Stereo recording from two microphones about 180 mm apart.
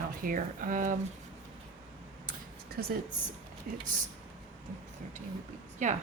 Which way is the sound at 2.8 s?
55° right (ahead or behind).